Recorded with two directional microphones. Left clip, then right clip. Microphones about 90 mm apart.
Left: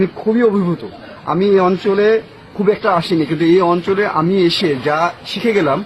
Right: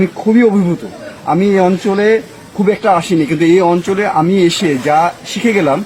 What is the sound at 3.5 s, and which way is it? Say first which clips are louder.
Speech: right 1 dB; 40° left (ahead or behind).